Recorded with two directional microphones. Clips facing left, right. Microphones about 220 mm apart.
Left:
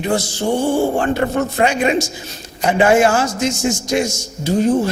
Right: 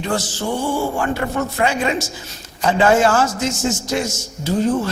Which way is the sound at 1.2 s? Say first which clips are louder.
Left 5 dB; 35° left (ahead or behind).